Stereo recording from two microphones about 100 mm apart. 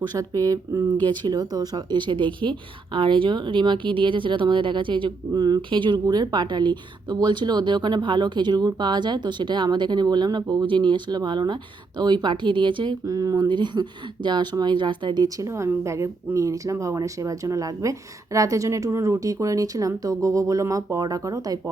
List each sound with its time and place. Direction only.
0.1 s a woman's voice: 35° right (ahead or behind); by 5.1 s 55° right (ahead or behind)
5.3 s speech: 40° right (ahead or behind)
15.4 s a woman's voice: 30° right (ahead or behind)